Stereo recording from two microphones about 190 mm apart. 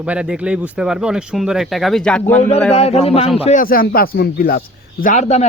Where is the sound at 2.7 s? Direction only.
35° left (ahead or behind); by 4.6 s 50° left (ahead or behind).